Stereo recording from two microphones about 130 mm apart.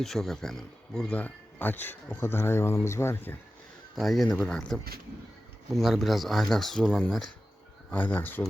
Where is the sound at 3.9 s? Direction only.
Centre (ahead or behind).